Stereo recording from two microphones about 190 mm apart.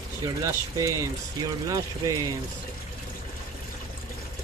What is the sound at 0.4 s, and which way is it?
Speech, 15° right (ahead or behind).